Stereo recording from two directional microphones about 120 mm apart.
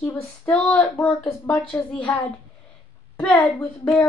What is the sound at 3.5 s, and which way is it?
Speech, 15° left (ahead or behind).